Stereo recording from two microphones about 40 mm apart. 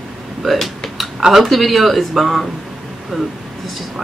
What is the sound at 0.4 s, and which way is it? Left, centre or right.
A man's voice, centre.